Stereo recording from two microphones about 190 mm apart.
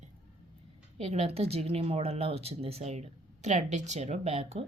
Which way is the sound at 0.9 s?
35° right (ahead or behind).